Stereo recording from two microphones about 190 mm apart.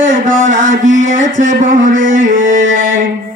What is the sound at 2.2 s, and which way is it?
Speech, 45° right (ahead or behind).